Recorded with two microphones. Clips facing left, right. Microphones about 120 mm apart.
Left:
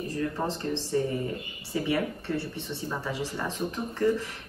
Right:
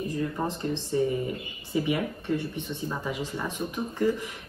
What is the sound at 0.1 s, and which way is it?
A woman's voice, 15° right (ahead or behind).